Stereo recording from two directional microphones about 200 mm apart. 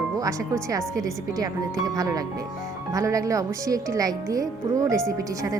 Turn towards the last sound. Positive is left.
turn(degrees=-15)  # may be behind; listen again after turning